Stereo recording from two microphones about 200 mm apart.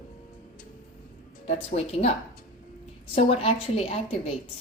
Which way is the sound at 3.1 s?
30° left (ahead or behind).